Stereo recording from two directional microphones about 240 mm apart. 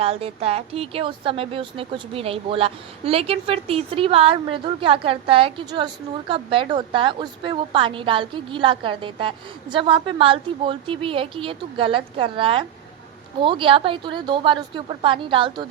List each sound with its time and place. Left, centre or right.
0.0 s a woman's voice: right